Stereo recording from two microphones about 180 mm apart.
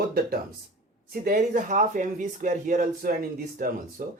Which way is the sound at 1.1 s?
55° right (ahead or behind).